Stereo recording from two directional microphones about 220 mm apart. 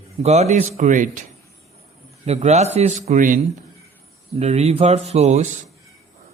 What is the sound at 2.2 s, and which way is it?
A man's voice, 30° right (ahead or behind).